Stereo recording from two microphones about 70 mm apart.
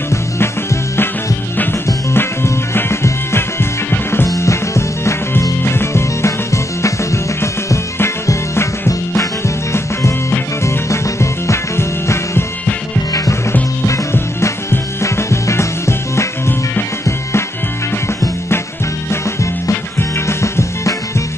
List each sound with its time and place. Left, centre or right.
0.1 s music: left
2.1 s music: left
4.3 s music: left
13.1 s music: left
14.1 s music: left
19.0 s music: left